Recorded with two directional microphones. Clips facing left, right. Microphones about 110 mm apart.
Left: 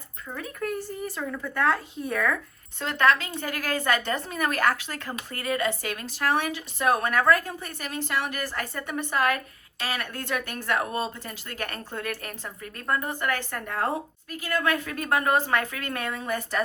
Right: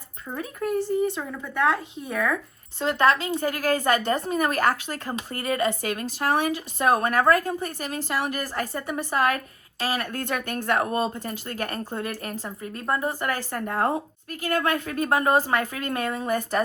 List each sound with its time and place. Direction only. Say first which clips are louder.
0.3 s speech: right 5 dB; 25° right (ahead or behind)
1.3 s speech: right 1 dB; 10° right (ahead or behind)
3.0 s a woman's voice: right 1 dB; 30° right (ahead or behind)
14.3 s speech: right 4 dB; 50° right (ahead or behind)
14.6 s a woman's voice: right 2 dB; 35° right (ahead or behind)